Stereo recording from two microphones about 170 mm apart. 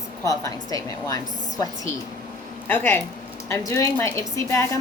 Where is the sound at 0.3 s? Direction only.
20° left (ahead or behind).